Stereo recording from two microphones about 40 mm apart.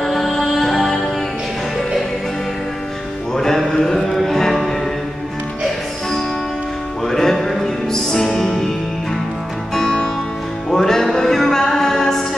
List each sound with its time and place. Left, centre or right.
0.0 s music: centre
3.3 s a sound: centre
4.3 s music: centre
7.1 s music: centre
9.8 s music: centre